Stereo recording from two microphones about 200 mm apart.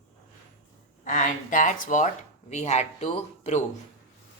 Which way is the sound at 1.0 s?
40° left (ahead or behind).